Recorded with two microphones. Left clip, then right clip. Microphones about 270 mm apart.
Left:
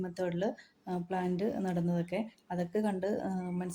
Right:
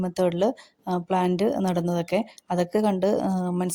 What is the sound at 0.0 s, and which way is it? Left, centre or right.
A woman's voice, right.